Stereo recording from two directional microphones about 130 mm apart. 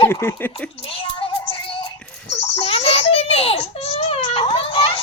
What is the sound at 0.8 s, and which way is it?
Music, 45° left (ahead or behind).